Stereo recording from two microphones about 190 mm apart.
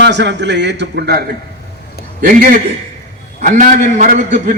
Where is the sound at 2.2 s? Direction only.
50° right (ahead or behind).